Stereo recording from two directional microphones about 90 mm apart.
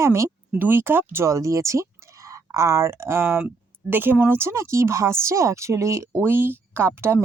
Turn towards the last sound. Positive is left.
turn(degrees=-25)  # may be behind; listen again after turning